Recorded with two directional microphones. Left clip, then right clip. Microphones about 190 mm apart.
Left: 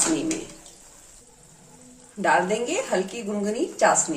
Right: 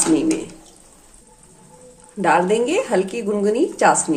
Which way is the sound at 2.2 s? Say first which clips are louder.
Right 5 dB; 35° right (ahead or behind).